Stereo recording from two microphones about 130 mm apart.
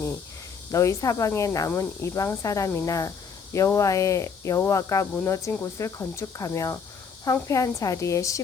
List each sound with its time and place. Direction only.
0.7 s speech: 25° left (ahead or behind)